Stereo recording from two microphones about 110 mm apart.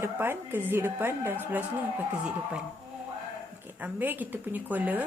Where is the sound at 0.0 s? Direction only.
20° right (ahead or behind).